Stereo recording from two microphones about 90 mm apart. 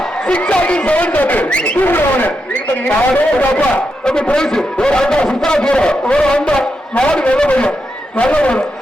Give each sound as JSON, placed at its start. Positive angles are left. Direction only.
{"t": 0.3, "sound": "a man's voice", "side_deg": 15}